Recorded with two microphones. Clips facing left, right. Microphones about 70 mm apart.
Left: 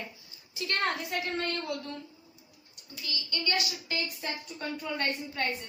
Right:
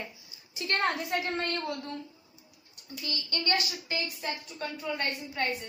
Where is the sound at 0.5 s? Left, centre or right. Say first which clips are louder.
Right 1 dB; right.